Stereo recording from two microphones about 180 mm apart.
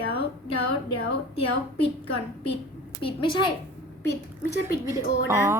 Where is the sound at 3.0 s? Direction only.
25° left (ahead or behind).